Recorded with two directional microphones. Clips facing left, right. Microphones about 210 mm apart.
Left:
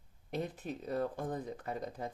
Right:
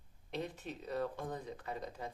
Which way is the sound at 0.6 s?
50° left (ahead or behind).